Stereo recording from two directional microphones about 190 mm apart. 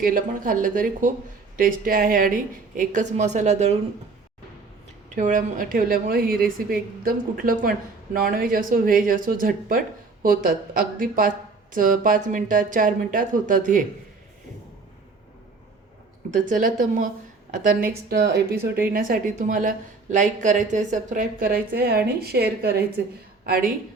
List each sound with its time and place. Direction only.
0.0 s a woman's voice: 45° right (ahead or behind)
5.1 s a woman's voice: 40° right (ahead or behind)
16.3 s a woman's voice: 45° right (ahead or behind)